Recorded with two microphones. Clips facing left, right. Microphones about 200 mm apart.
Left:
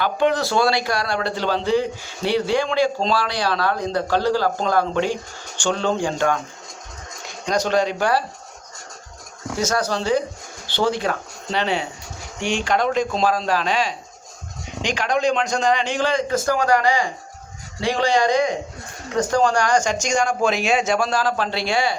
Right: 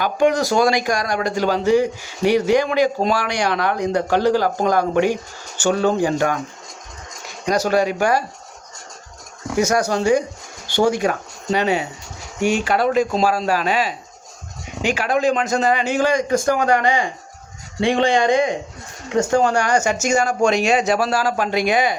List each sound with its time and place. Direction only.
0.0 s a man's voice: 15° right (ahead or behind)
7.4 s a man's voice: 10° right (ahead or behind)
9.6 s a man's voice: 10° right (ahead or behind)
12.4 s speech: 45° right (ahead or behind)
12.6 s a man's voice: 5° right (ahead or behind); by 18.5 s 20° right (ahead or behind)
19.4 s a man's voice: 10° right (ahead or behind)